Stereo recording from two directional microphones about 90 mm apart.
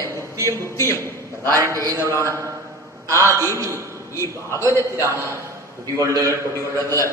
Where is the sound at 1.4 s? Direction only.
35° right (ahead or behind).